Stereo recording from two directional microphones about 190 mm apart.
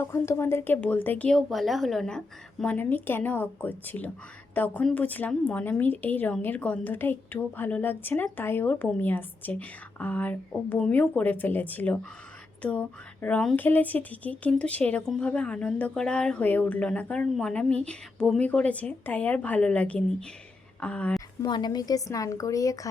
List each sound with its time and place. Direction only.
0.0 s a woman's voice: 15° left (ahead or behind)
21.4 s a woman's voice: 20° left (ahead or behind)